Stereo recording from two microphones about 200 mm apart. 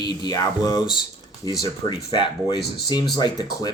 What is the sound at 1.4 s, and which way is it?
Speech, 20° right (ahead or behind).